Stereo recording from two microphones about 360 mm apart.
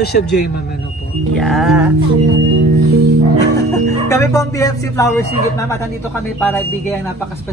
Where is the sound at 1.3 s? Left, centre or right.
Centre.